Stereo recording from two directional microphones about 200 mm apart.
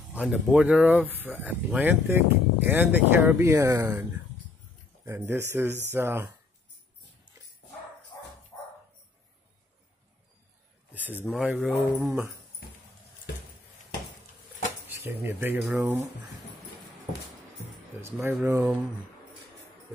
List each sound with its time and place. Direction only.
0.2 s speech: 5° right (ahead or behind)
5.0 s speech: 10° right (ahead or behind)
8.1 s dog: 15° left (ahead or behind)
10.9 s a sound: 10° right (ahead or behind)
11.2 s speech: 5° right (ahead or behind)
14.9 s speech: 10° right (ahead or behind)
18.0 s speech: 10° right (ahead or behind)